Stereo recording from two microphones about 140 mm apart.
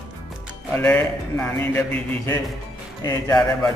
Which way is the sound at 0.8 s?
10° left (ahead or behind).